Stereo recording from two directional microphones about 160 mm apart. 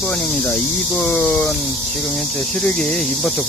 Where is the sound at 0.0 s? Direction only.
5° left (ahead or behind).